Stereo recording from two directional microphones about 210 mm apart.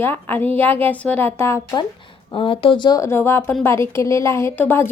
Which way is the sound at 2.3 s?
25° left (ahead or behind).